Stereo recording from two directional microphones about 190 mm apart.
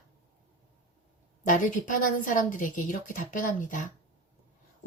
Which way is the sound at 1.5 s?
45° left (ahead or behind).